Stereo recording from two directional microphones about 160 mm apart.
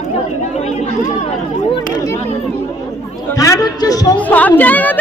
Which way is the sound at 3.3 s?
20° left (ahead or behind).